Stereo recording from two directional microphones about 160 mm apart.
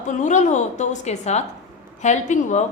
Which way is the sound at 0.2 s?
50° left (ahead or behind).